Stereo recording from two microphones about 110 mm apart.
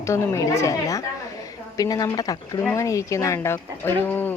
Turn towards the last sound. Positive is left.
turn(degrees=20)  # may be behind; listen again after turning